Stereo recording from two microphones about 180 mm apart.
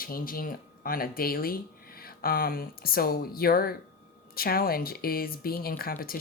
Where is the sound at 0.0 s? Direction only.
55° left (ahead or behind).